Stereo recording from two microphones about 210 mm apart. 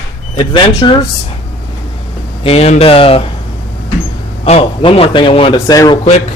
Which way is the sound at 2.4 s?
30° left (ahead or behind).